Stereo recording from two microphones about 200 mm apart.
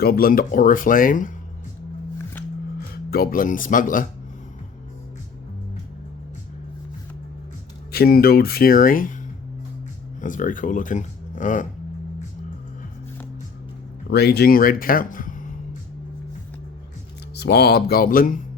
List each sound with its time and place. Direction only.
0.0 s speech: 50° left (ahead or behind)
2.9 s speech: 50° left (ahead or behind)
7.9 s speech: 50° left (ahead or behind)
10.2 s speech: 40° left (ahead or behind)
14.1 s speech: 55° left (ahead or behind)
17.3 s speech: 55° left (ahead or behind)